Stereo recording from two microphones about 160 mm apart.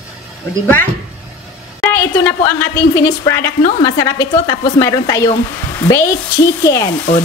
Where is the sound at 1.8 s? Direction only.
15° left (ahead or behind).